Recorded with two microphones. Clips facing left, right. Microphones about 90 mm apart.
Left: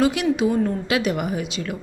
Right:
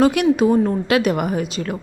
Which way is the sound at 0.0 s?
50° right (ahead or behind).